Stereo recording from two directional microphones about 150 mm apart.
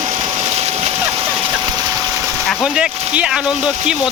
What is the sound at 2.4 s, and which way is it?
Speech, centre (ahead or behind).